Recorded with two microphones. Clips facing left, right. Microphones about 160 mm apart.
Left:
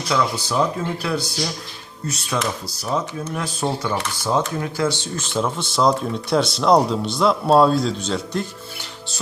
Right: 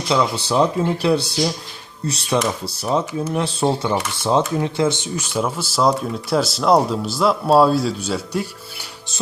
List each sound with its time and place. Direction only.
0.1 s speech: 25° right (ahead or behind); by 8.4 s 10° right (ahead or behind)